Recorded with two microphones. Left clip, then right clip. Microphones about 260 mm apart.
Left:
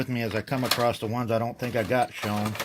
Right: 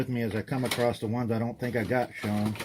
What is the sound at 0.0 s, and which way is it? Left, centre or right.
Speech, left.